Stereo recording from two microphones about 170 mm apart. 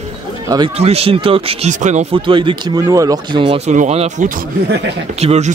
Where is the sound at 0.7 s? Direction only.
35° right (ahead or behind).